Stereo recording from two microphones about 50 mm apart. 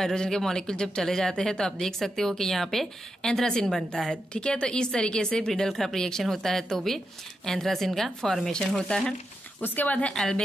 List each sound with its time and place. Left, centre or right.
0.0 s speech: centre
4.3 s speech: centre
5.5 s speech: centre
9.6 s speech: left
10.0 s speech: centre